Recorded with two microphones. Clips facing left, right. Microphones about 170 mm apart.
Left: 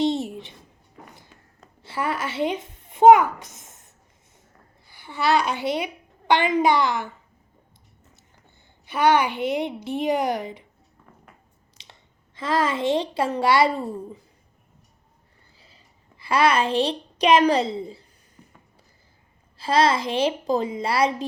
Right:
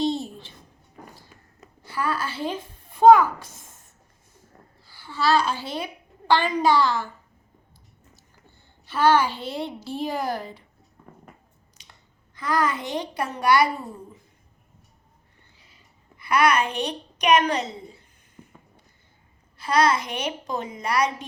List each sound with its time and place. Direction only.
0.0 s a sound: 20° left (ahead or behind)
1.8 s a child's voice: 25° left (ahead or behind)
4.9 s a woman's voice: 20° left (ahead or behind)
8.1 s a woman's voice: 15° left (ahead or behind)
11.8 s a child's voice: 25° left (ahead or behind)
15.5 s a child's voice: 35° left (ahead or behind)
19.5 s a child's voice: 30° left (ahead or behind)